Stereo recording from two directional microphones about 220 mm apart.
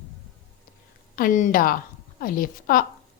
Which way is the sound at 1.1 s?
40° left (ahead or behind).